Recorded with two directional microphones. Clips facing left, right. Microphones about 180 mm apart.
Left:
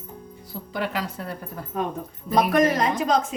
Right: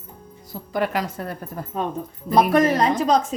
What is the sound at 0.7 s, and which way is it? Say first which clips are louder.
Speech: right 5 dB; 45° right (ahead or behind).